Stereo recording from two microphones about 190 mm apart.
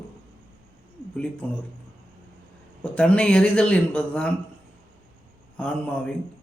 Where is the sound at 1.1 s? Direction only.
5° left (ahead or behind).